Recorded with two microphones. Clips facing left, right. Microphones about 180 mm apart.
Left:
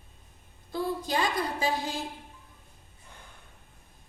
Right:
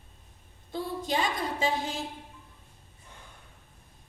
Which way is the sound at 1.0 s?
25° right (ahead or behind).